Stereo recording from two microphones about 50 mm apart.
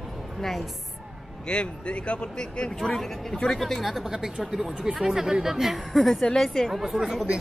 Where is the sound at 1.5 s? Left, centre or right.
Left; by 4.1 s centre.